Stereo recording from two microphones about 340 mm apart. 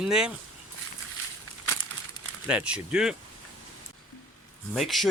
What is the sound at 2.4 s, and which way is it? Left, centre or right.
Speech, centre.